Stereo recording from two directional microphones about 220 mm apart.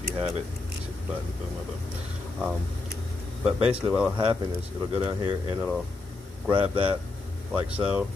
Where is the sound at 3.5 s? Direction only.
25° right (ahead or behind).